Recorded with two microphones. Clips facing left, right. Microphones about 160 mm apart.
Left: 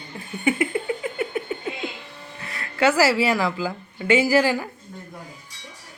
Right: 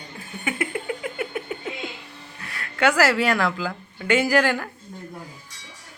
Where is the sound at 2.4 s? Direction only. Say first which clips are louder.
Left 1 dB; centre (ahead or behind).